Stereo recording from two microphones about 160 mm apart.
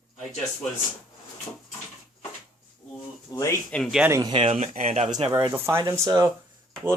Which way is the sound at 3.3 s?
25° left (ahead or behind).